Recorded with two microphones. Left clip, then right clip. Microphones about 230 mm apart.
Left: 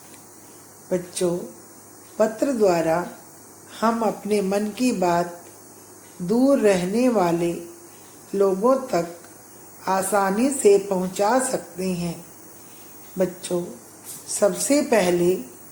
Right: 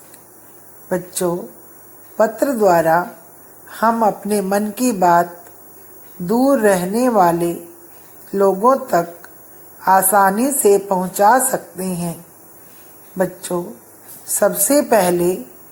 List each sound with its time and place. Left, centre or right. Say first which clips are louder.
0.9 s a woman's voice: right 4 dB; right
6.2 s a woman's voice: right 4 dB; right
13.1 s a woman's voice: right 4 dB; right